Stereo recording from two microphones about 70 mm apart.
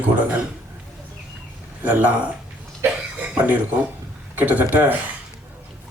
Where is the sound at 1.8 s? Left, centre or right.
Right.